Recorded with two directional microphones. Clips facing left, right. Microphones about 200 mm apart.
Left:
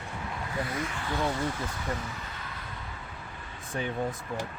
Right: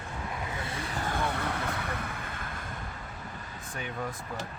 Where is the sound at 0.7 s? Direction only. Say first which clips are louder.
Left 1 dB; 30° right (ahead or behind); by 2.6 s 50° right (ahead or behind).